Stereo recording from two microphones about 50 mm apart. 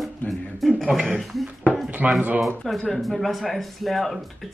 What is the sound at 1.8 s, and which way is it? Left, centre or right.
Speech, right.